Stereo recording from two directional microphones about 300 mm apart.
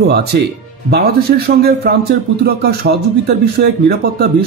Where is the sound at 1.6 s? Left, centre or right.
Right.